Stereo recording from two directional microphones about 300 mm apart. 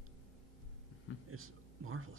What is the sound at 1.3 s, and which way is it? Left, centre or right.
Speech, right.